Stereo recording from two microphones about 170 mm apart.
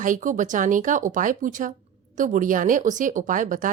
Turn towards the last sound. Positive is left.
turn(degrees=-50)  # may be behind; listen again after turning